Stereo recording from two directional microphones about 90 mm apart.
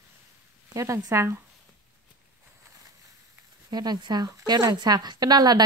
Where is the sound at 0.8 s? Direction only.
35° right (ahead or behind).